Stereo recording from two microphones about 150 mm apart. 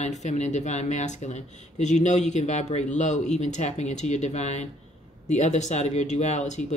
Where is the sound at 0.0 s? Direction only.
50° left (ahead or behind).